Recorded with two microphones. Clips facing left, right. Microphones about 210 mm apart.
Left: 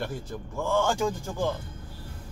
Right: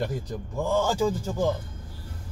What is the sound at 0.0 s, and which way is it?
A man's voice, 15° right (ahead or behind).